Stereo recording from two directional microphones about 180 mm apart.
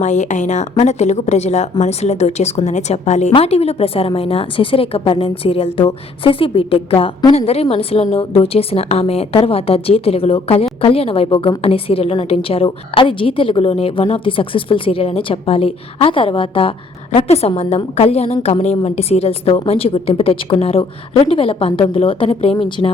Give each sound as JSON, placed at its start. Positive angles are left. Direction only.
{"t": 0.0, "sound": "a woman's voice", "side_deg": 40}